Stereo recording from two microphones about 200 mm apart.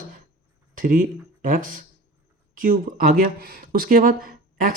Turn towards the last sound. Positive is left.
turn(degrees=-45)  # may be behind; listen again after turning